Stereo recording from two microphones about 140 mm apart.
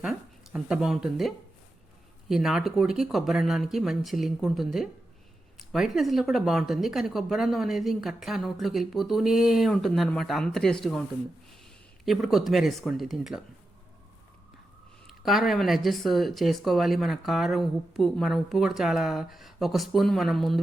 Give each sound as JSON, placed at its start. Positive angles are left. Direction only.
{"t": 0.0, "sound": "speech", "side_deg": -5}
{"t": 2.3, "sound": "speech", "side_deg": -5}
{"t": 12.0, "sound": "speech", "side_deg": 0}
{"t": 15.0, "sound": "speech", "side_deg": 0}